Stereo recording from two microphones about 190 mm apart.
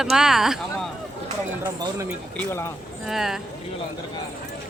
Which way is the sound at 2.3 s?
15° left (ahead or behind).